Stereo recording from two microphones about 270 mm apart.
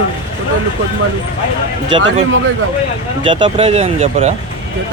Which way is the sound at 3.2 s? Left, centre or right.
Centre.